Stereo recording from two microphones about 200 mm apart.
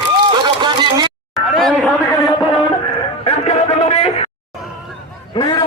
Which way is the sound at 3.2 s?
30° left (ahead or behind).